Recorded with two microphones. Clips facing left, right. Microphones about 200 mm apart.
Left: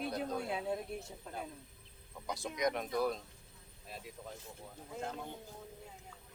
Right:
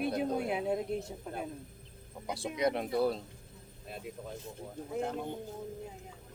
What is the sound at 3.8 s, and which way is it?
Speech, 60° right (ahead or behind).